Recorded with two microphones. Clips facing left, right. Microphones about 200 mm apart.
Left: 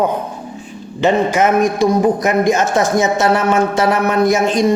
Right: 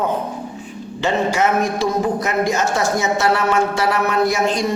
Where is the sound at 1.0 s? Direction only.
20° left (ahead or behind).